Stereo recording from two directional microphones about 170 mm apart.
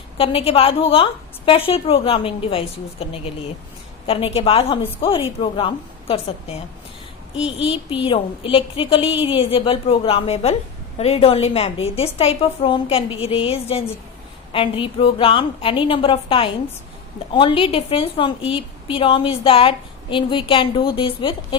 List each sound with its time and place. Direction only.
0.2 s a woman's voice: 35° left (ahead or behind)
7.6 s a woman's voice: 30° left (ahead or behind)